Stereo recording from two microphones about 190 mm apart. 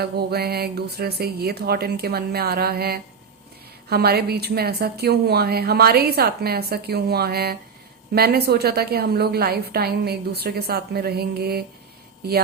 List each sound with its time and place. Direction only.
0.0 s a woman's voice: 55° right (ahead or behind)